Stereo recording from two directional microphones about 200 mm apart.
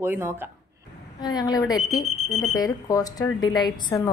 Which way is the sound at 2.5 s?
20° left (ahead or behind).